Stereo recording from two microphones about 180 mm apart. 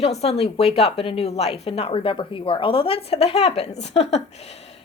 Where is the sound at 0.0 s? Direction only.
35° left (ahead or behind).